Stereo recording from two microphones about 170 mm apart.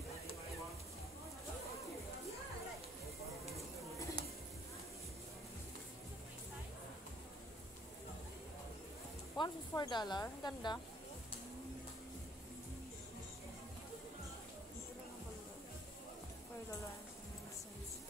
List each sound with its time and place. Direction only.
9.4 s speech: 25° left (ahead or behind)